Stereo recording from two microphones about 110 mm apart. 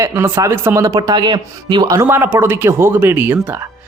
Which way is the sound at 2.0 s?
20° right (ahead or behind).